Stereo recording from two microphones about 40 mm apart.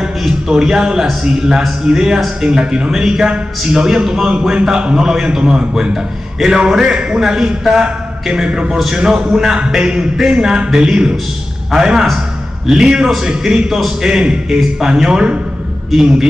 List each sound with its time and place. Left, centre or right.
0.5 s a man's voice: centre